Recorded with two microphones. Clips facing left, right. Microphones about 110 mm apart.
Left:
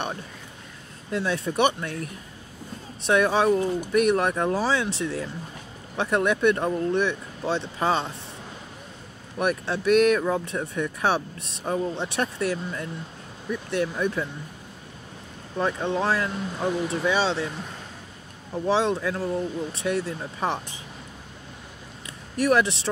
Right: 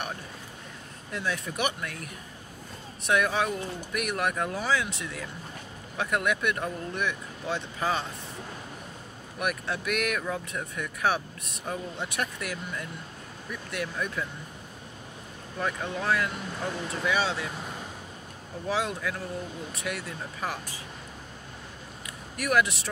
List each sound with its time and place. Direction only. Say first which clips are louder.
1.1 s speech: left 7 dB; 30° left (ahead or behind)
9.4 s speech: left 6 dB; 30° left (ahead or behind)
15.5 s speech: left 6 dB; 30° left (ahead or behind)
18.7 s speech: left 7 dB; 30° left (ahead or behind)
22.4 s speech: left 5 dB; 30° left (ahead or behind)